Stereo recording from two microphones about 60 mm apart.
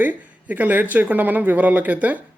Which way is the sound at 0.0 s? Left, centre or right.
Right.